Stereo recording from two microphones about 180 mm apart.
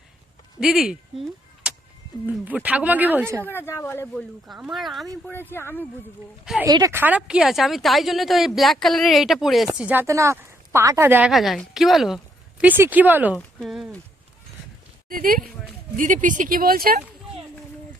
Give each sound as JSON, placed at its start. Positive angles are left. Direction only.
{"t": 0.6, "sound": "a woman's voice", "side_deg": 0}
{"t": 2.2, "sound": "speech", "side_deg": -10}
{"t": 3.4, "sound": "speech", "side_deg": 10}
{"t": 4.1, "sound": "a woman's voice", "side_deg": 0}
{"t": 5.2, "sound": "speech", "side_deg": 10}
{"t": 6.4, "sound": "a woman's voice", "side_deg": -5}
{"t": 6.7, "sound": "a woman's voice", "side_deg": -20}
{"t": 11.3, "sound": "a woman's voice", "side_deg": 0}
{"t": 15.1, "sound": "speech", "side_deg": -50}